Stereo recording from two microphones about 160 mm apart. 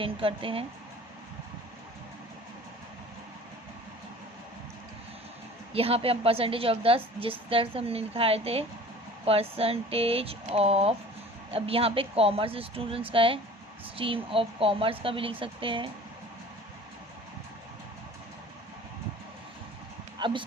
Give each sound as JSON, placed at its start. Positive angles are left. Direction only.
{"t": 0.0, "sound": "a woman's voice", "side_deg": -35}
{"t": 5.7, "sound": "a woman's voice", "side_deg": -35}
{"t": 20.1, "sound": "a sound", "side_deg": -30}